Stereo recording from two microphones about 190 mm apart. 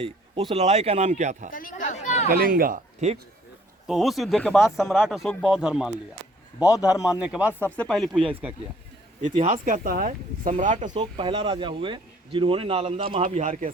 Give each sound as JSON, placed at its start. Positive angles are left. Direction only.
{"t": 0.0, "sound": "speech", "side_deg": -35}
{"t": 1.5, "sound": "chatter", "side_deg": 45}
{"t": 2.3, "sound": "speech", "side_deg": -50}
{"t": 3.8, "sound": "speech", "side_deg": 0}
{"t": 9.2, "sound": "speech", "side_deg": -35}
{"t": 10.9, "sound": "speech", "side_deg": -25}